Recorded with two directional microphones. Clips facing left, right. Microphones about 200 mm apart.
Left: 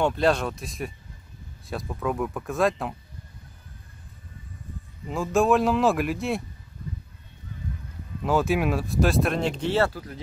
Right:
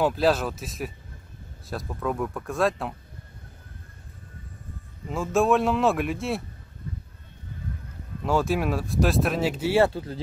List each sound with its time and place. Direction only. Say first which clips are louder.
0.0 s speech: even; 5° right (ahead or behind)
5.0 s speech: left 1 dB; centre (ahead or behind)
8.2 s speech: left 1 dB; centre (ahead or behind)
9.8 s speech: right 4 dB; 25° right (ahead or behind)